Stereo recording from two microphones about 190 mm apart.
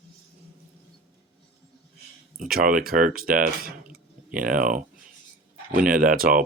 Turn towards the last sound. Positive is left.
turn(degrees=-50)  # may be behind; listen again after turning